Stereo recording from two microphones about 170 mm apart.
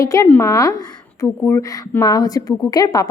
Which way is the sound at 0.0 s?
20° left (ahead or behind).